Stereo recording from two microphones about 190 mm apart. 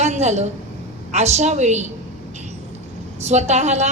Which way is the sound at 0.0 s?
35° right (ahead or behind).